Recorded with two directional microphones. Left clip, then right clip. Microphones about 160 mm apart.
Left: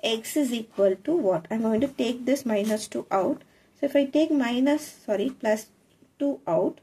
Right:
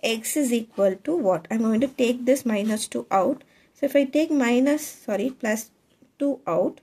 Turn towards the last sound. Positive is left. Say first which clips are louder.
# right 1 dB
turn(degrees=-45)  # may be behind; listen again after turning